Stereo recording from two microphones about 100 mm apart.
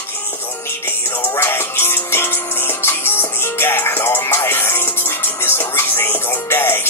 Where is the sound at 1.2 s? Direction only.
25° left (ahead or behind).